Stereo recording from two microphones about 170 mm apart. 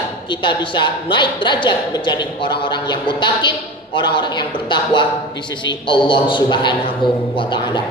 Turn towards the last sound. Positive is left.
turn(degrees=25)  # may be behind; listen again after turning